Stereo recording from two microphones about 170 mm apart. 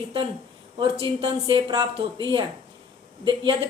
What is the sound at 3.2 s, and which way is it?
Speech, 25° right (ahead or behind).